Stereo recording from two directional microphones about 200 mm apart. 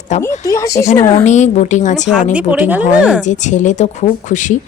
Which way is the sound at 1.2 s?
35° left (ahead or behind).